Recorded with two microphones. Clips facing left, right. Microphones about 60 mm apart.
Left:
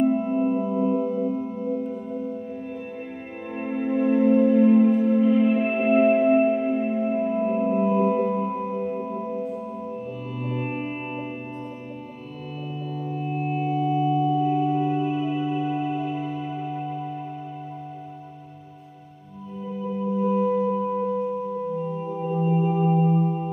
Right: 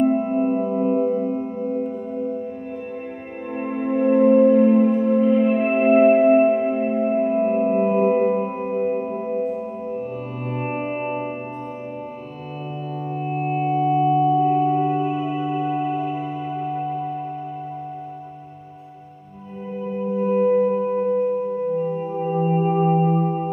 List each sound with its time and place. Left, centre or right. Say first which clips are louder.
0.0 s music: right 2 dB; right
1.9 s music: right 4 dB; right
3.5 s music: right 2 dB; centre
4.1 s music: right 5 dB; right
5.5 s music: right 4 dB; right
13.2 s music: right 4 dB; right; by 17.1 s centre
19.8 s singing bowl: right 2 dB; right